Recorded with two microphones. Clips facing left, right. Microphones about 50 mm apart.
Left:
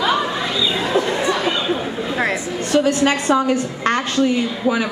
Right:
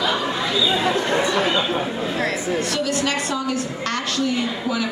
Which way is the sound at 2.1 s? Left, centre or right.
Left.